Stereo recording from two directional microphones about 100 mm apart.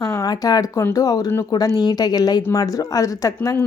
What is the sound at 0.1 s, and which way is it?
A woman's voice, 35° left (ahead or behind).